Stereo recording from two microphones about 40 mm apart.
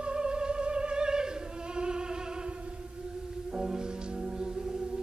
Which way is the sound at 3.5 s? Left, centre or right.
Centre.